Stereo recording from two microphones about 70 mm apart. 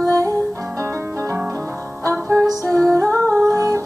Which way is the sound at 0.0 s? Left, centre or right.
Right.